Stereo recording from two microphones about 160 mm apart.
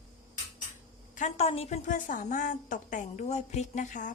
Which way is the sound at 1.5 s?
40° left (ahead or behind).